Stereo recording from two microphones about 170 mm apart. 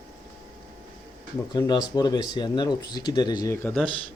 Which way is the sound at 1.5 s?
25° left (ahead or behind).